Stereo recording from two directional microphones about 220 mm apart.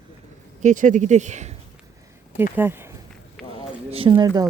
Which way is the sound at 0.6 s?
35° right (ahead or behind).